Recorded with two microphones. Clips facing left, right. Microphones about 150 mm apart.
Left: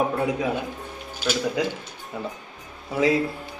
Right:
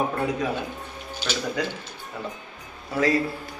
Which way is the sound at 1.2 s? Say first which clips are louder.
Left 4 dB; 10° left (ahead or behind).